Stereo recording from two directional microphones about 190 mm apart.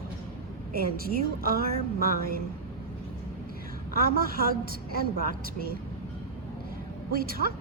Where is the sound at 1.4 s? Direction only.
50° right (ahead or behind).